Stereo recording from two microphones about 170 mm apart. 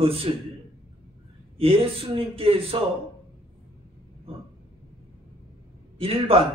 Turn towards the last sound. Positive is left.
turn(degrees=-35)  # may be behind; listen again after turning